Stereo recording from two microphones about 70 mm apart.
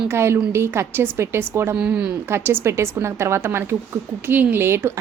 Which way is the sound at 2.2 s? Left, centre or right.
Right.